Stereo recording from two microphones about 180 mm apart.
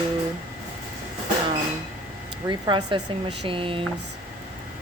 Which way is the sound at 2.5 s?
25° right (ahead or behind).